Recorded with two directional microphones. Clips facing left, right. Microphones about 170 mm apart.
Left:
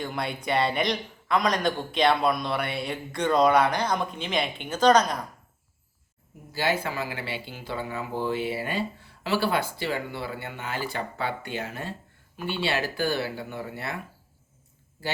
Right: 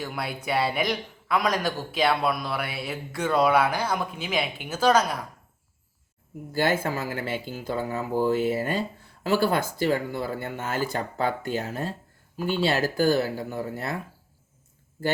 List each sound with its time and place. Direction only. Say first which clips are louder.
0.0 s a man's voice: left 1 dB; 5° right (ahead or behind)
6.5 s speech: right 3 dB; 50° right (ahead or behind)